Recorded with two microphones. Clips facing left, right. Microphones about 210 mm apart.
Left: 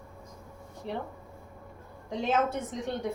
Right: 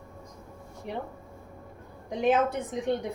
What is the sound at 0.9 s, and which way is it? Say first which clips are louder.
Speech: even; 15° right (ahead or behind).